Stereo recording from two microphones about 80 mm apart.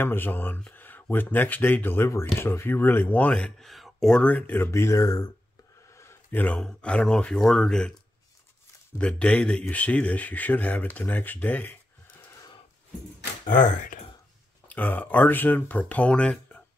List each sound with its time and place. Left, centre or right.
0.0 s speech: left; by 4.2 s centre
4.2 s speech: centre
4.6 s speech: left
6.3 s speech: centre
8.9 s speech: centre
14.7 s speech: left